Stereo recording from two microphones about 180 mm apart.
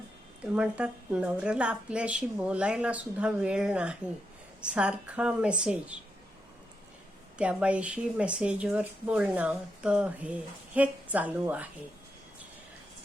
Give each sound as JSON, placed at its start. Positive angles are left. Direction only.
{"t": 0.5, "sound": "speech", "side_deg": -5}
{"t": 7.3, "sound": "speech", "side_deg": -5}